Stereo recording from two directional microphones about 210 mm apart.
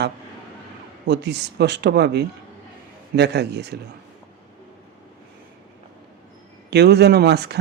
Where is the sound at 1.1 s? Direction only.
55° right (ahead or behind).